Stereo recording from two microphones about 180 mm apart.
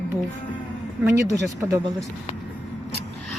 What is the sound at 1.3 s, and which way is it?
Speech, 20° right (ahead or behind).